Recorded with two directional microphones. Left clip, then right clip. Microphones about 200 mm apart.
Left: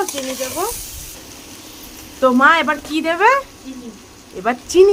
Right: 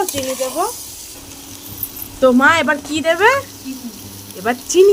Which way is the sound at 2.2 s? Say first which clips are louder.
Even; 10° right (ahead or behind).